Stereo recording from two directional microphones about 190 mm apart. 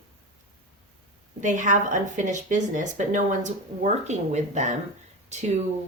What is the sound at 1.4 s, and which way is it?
Speech, 40° right (ahead or behind).